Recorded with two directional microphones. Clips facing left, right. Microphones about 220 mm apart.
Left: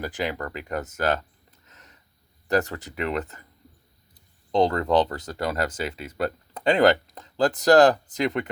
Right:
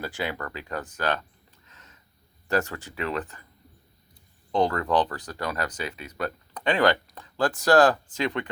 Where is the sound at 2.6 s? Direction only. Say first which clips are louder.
Left 2 dB; 40° left (ahead or behind).